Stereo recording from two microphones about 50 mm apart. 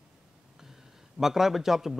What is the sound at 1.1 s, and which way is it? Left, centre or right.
Speech, centre.